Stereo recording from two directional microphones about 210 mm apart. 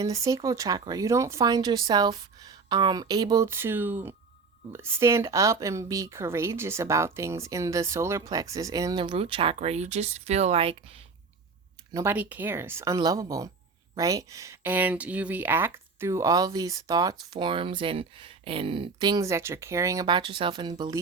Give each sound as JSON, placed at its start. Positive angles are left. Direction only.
{"t": 0.0, "sound": "speech", "side_deg": -15}
{"t": 11.9, "sound": "speech", "side_deg": -10}